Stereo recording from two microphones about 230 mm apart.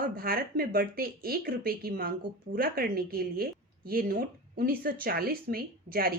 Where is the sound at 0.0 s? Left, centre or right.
Right.